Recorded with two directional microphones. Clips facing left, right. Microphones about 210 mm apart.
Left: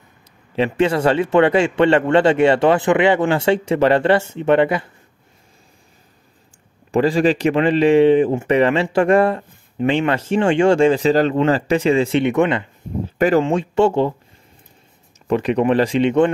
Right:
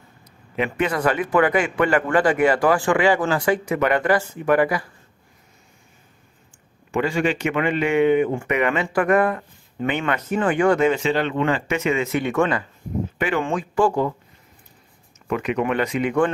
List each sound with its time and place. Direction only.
0.7 s a man's voice: 25° left (ahead or behind)
6.9 s a man's voice: 35° left (ahead or behind)
15.2 s speech: 35° left (ahead or behind)